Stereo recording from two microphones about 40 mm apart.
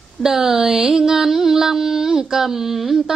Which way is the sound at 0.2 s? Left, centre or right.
Centre.